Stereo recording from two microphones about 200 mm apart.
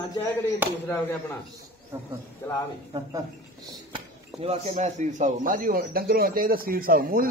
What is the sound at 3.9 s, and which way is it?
Speech, 30° right (ahead or behind).